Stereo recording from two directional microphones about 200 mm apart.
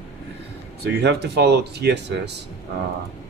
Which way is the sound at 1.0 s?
55° right (ahead or behind).